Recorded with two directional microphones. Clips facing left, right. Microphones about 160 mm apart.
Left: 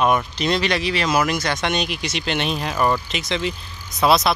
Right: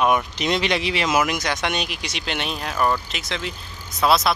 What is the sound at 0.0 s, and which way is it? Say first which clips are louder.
Speech: left 1 dB; 15° right (ahead or behind).